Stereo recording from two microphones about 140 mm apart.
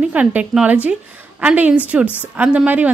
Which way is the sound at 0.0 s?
10° right (ahead or behind).